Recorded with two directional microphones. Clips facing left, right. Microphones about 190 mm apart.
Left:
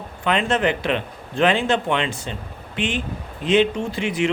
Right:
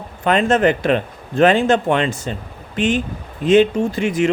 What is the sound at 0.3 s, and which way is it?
Speech, 45° right (ahead or behind).